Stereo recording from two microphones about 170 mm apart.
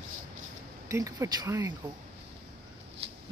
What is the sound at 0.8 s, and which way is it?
Speech, 20° right (ahead or behind).